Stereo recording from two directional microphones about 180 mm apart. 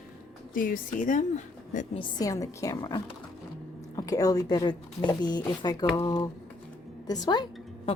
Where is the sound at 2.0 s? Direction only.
20° left (ahead or behind).